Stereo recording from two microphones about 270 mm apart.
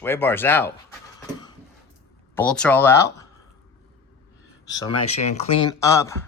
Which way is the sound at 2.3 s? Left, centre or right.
Centre.